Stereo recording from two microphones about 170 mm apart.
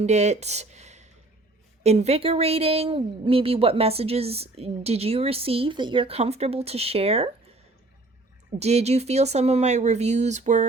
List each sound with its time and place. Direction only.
0.0 s speech: 40° right (ahead or behind)
8.5 s speech: 40° right (ahead or behind)